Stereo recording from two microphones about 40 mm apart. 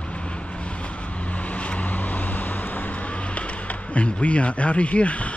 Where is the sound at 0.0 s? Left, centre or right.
Left.